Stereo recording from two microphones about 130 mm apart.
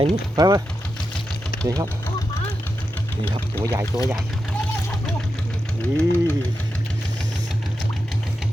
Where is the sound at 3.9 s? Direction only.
5° right (ahead or behind).